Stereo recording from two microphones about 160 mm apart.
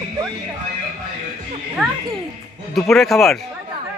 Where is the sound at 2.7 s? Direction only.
Centre (ahead or behind).